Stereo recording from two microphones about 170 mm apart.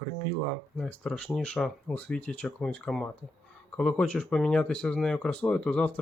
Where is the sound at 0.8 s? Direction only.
5° left (ahead or behind).